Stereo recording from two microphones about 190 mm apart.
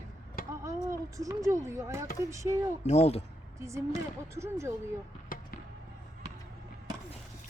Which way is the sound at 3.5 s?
15° right (ahead or behind).